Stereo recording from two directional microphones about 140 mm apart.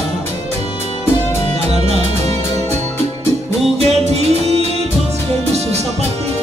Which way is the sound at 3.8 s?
50° right (ahead or behind).